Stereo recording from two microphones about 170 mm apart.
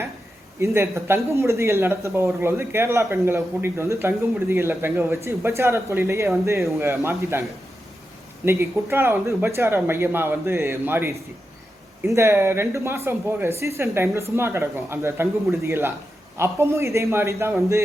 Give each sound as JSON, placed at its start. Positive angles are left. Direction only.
{"t": 0.6, "sound": "speech", "side_deg": -15}
{"t": 8.4, "sound": "speech", "side_deg": -15}